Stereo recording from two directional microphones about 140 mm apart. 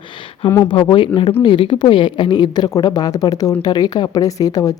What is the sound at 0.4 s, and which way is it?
Speech, 30° left (ahead or behind).